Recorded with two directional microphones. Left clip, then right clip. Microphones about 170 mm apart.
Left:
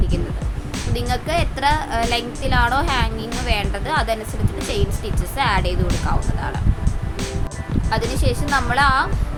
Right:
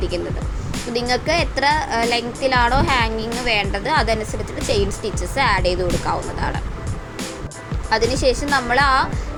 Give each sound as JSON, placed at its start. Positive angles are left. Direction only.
{"t": 0.7, "sound": "a woman's voice", "side_deg": -5}
{"t": 8.1, "sound": "a woman's voice", "side_deg": -10}